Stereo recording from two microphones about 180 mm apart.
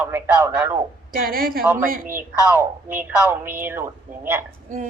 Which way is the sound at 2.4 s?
10° right (ahead or behind).